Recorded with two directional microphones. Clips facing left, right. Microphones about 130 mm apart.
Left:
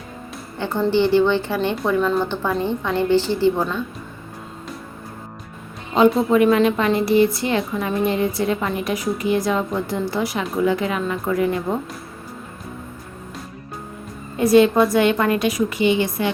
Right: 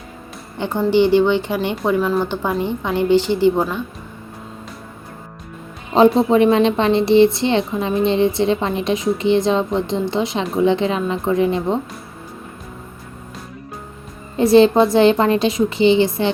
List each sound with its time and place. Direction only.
0.6 s a woman's voice: 15° right (ahead or behind)
6.1 s a woman's voice: 25° right (ahead or behind)
14.3 s a woman's voice: 30° right (ahead or behind)